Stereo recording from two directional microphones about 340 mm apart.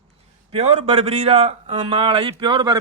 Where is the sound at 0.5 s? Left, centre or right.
Centre.